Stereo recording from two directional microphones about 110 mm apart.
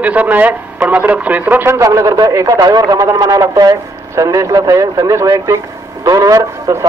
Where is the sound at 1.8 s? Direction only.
30° right (ahead or behind).